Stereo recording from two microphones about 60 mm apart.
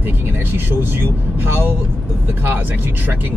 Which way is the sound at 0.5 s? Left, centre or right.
Right.